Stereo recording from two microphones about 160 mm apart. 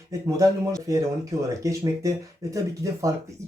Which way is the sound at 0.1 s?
20° right (ahead or behind).